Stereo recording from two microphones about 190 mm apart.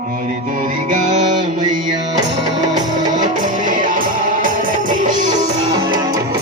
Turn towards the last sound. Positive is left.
turn(degrees=-45)  # may be behind; listen again after turning